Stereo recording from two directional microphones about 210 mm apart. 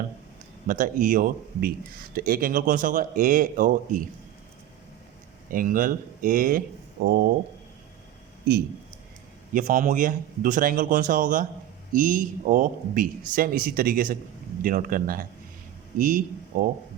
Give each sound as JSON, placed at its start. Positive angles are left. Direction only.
{"t": 0.7, "sound": "speech", "side_deg": -40}
{"t": 5.5, "sound": "speech", "side_deg": -40}
{"t": 9.5, "sound": "speech", "side_deg": -40}